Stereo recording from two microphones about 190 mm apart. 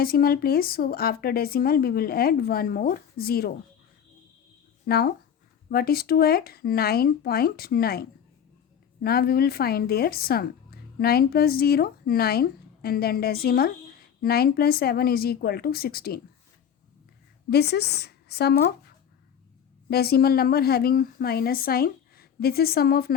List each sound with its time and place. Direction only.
0.0 s speech: 50° left (ahead or behind)
4.9 s a woman's voice: 60° left (ahead or behind)
17.5 s a woman's voice: 60° left (ahead or behind)
19.9 s a woman's voice: 55° left (ahead or behind)